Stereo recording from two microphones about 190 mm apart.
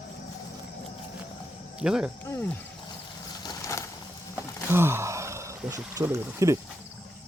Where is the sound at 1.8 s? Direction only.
5° right (ahead or behind).